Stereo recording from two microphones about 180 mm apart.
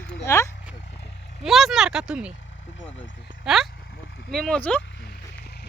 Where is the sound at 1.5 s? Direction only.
Centre (ahead or behind).